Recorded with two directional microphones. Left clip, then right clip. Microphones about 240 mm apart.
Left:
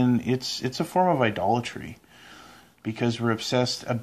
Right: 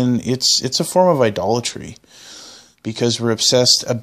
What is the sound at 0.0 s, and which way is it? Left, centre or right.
Speech, right.